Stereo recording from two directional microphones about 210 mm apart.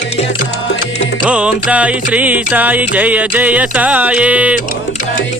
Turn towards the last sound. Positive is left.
turn(degrees=-5)  # may be behind; listen again after turning